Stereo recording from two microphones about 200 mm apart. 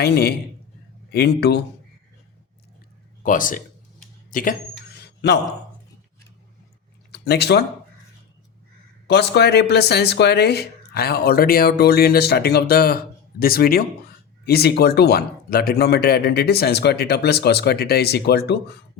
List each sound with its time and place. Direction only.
0.0 s speech: 55° left (ahead or behind)
3.2 s speech: 40° left (ahead or behind)
4.3 s a sound: 45° left (ahead or behind)
7.1 s speech: 55° left (ahead or behind)
9.0 s speech: 55° left (ahead or behind)